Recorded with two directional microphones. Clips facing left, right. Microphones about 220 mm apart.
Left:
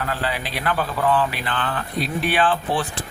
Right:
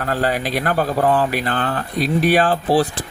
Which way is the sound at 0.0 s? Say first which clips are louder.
Right 6 dB; 45° right (ahead or behind).